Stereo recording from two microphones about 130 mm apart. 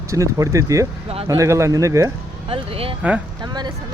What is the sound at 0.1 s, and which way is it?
Speech, 25° right (ahead or behind).